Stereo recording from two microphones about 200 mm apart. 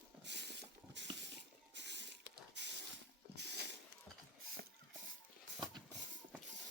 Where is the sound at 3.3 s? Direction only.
55° right (ahead or behind).